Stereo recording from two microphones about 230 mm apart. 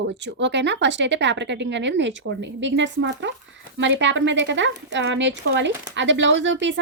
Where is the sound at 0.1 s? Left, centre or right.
Right.